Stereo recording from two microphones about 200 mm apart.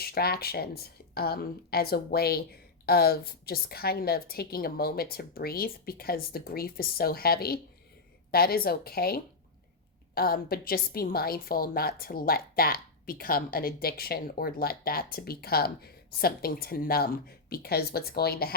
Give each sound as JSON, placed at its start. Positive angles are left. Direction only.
{"t": 0.0, "sound": "a woman's voice", "side_deg": 50}